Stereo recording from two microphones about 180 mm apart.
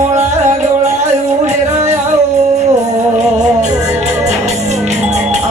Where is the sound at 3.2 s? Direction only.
40° right (ahead or behind).